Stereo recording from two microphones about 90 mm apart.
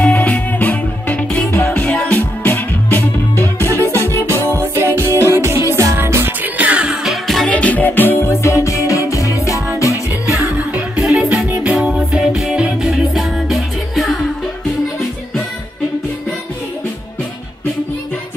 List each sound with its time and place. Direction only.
0.0 s music: 15° left (ahead or behind)
3.5 s music: 30° right (ahead or behind); by 7.5 s centre (ahead or behind)
7.5 s music: 15° left (ahead or behind); by 10.3 s 35° left (ahead or behind)
10.3 s music: 10° right (ahead or behind)